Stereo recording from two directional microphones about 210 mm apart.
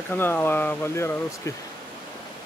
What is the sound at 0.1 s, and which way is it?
Speech, 10° left (ahead or behind).